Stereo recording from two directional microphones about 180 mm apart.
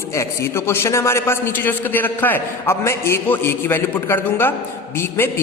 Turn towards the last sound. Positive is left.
turn(degrees=15)  # may be behind; listen again after turning